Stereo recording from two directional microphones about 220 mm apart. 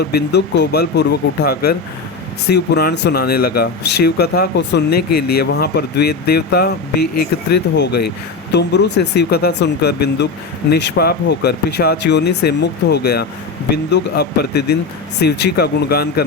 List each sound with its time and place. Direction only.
0.0 s speech: 50° left (ahead or behind)